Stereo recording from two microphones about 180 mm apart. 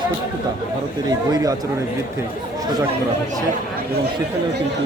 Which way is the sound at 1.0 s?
20° right (ahead or behind).